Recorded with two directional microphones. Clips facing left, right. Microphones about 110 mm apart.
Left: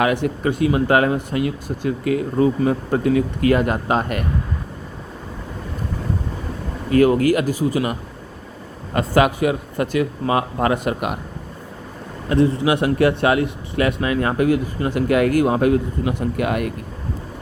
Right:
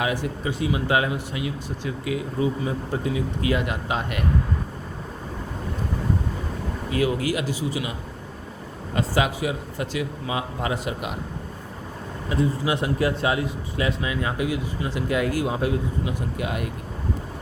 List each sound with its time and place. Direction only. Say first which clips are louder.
0.0 s speech: left 7 dB; 60° left (ahead or behind)
6.9 s a man's voice: left 9 dB; 50° left (ahead or behind)
12.3 s a man's voice: left 7 dB; 70° left (ahead or behind)